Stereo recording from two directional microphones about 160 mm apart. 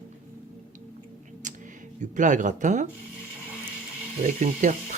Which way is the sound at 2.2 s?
50° right (ahead or behind).